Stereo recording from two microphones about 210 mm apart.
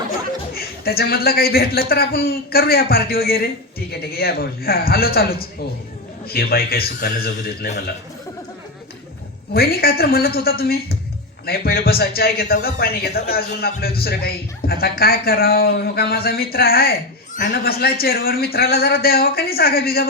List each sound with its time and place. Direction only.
0.5 s speech: 45° left (ahead or behind)
9.5 s speech: 45° left (ahead or behind)